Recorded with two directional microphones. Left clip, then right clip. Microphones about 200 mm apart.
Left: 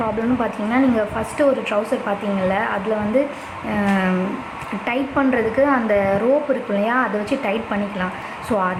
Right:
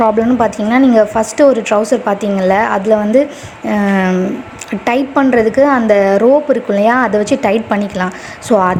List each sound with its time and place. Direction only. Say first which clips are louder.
0.0 s a woman's voice: right 10 dB; 40° right (ahead or behind)